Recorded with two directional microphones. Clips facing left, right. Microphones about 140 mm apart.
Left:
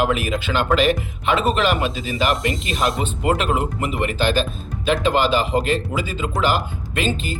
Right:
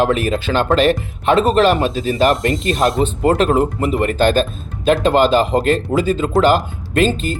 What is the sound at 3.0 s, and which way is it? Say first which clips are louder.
Speech: right 6 dB; 40° right (ahead or behind).